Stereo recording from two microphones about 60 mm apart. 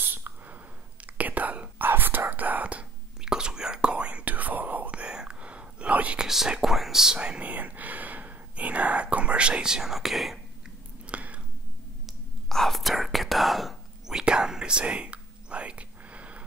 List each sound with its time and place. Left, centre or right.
0.0 s a sound: right
1.0 s whispering: right
3.2 s whispering: centre
6.2 s whispering: centre
7.2 s whispering: right; by 10.4 s centre
11.1 s a sound: right
12.1 s whispering: centre; by 16.4 s right